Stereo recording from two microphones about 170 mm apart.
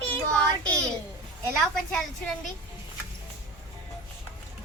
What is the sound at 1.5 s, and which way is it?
Speech, 5° left (ahead or behind).